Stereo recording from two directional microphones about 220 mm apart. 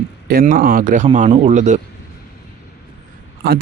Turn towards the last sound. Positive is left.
turn(degrees=-50)  # may be behind; listen again after turning